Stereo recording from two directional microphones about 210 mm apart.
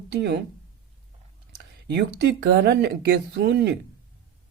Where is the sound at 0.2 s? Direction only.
55° right (ahead or behind).